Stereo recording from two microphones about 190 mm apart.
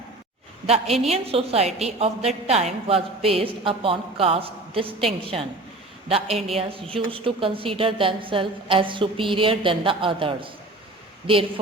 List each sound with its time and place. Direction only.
1.0 s a woman's voice: 30° right (ahead or behind)